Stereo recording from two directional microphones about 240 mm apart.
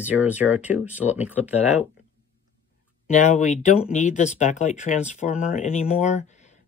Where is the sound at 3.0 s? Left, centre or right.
Left.